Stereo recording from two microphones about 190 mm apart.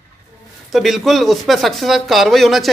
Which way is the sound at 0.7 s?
Centre (ahead or behind).